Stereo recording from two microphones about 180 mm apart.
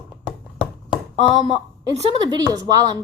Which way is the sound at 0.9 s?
25° left (ahead or behind).